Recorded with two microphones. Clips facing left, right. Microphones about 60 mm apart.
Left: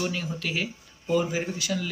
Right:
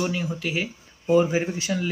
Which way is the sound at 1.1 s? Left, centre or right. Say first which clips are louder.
Right 5 dB; right.